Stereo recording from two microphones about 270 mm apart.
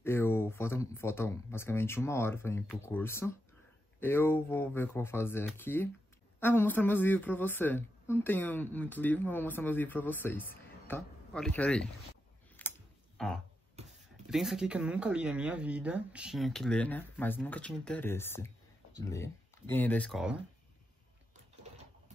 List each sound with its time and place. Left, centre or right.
0.0 s speech: centre
12.6 s a sound: centre
13.2 s speech: centre